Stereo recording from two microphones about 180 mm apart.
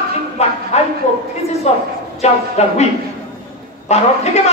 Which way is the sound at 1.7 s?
35° left (ahead or behind).